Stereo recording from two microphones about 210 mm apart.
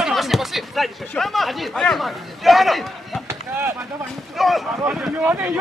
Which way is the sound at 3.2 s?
10° right (ahead or behind).